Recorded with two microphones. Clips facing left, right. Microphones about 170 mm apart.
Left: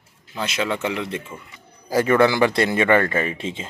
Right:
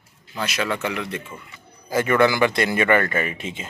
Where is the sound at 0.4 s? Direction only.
25° left (ahead or behind).